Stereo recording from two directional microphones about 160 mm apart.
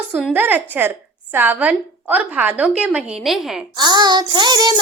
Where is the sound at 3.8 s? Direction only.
25° right (ahead or behind).